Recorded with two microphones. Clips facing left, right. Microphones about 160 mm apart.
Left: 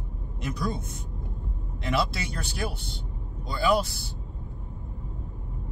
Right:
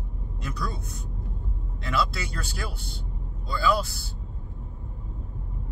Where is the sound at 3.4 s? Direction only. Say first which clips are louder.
Left 1 dB; 20° left (ahead or behind).